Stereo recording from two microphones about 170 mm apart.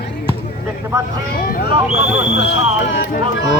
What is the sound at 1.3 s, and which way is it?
Speech, 65° left (ahead or behind).